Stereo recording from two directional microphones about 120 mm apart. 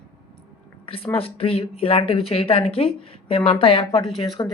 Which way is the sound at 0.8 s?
50° left (ahead or behind).